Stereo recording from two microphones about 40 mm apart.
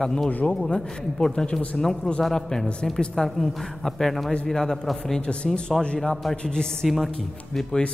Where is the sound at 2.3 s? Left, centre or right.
Centre.